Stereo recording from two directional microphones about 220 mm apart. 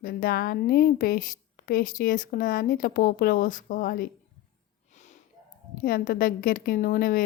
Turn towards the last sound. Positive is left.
turn(degrees=40)  # may be behind; listen again after turning